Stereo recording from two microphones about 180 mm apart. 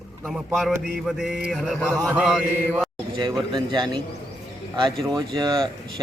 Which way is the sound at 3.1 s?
25° right (ahead or behind).